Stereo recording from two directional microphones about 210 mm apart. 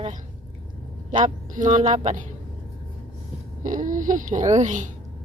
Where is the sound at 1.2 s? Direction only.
35° right (ahead or behind).